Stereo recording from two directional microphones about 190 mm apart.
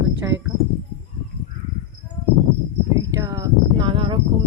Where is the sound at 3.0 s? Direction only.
20° right (ahead or behind).